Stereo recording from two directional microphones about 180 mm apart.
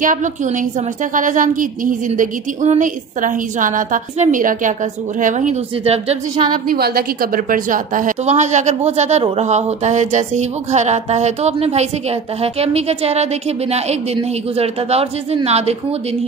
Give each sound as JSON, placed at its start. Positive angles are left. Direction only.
{"t": 0.0, "sound": "a woman's voice", "side_deg": -45}
{"t": 6.7, "sound": "a woman's voice", "side_deg": -55}